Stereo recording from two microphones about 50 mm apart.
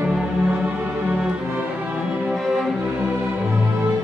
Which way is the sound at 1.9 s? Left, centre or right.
Centre.